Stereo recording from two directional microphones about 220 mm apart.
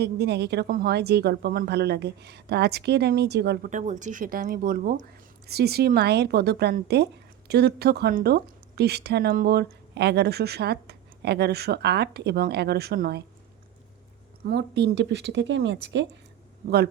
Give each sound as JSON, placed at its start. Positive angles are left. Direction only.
{"t": 0.0, "sound": "speech", "side_deg": -50}
{"t": 3.7, "sound": "speech", "side_deg": -35}
{"t": 14.4, "sound": "speech", "side_deg": -50}